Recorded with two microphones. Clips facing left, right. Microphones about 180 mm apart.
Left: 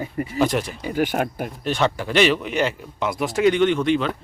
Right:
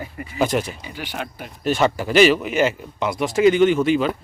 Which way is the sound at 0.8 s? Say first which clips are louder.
Left 9 dB; 45° left (ahead or behind).